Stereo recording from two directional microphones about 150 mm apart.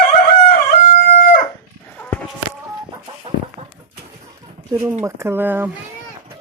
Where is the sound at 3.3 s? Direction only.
35° right (ahead or behind).